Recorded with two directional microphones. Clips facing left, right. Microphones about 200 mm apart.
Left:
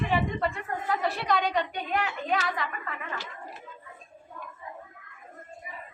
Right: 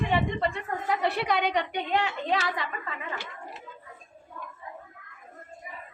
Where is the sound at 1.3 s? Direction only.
65° right (ahead or behind).